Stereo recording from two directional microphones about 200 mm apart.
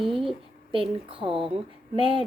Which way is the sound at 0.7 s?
25° right (ahead or behind).